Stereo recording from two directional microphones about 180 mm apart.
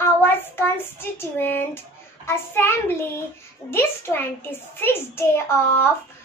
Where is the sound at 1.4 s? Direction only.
10° left (ahead or behind).